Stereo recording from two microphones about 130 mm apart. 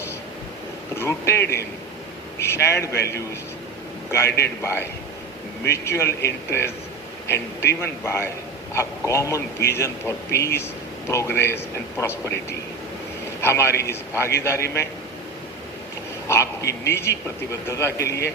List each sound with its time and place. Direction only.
0.9 s a man's voice: 20° left (ahead or behind)
16.3 s a man's voice: 20° left (ahead or behind)